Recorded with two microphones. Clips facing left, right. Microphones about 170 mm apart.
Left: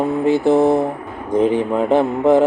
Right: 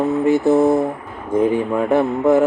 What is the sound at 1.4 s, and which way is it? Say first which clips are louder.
Speech: left 1 dB; 20° left (ahead or behind).